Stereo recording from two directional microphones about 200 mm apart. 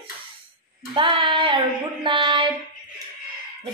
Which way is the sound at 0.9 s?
25° right (ahead or behind).